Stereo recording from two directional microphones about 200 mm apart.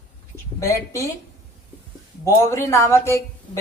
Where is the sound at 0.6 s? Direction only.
15° left (ahead or behind).